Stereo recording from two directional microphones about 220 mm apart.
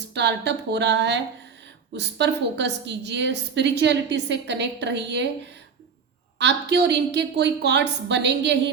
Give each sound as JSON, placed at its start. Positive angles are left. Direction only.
{"t": 0.1, "sound": "a woman's voice", "side_deg": -50}
{"t": 6.4, "sound": "a woman's voice", "side_deg": -50}